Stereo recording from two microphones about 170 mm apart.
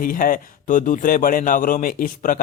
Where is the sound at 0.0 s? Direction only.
55° left (ahead or behind).